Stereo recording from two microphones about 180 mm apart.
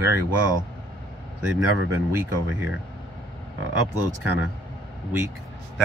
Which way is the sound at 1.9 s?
10° right (ahead or behind).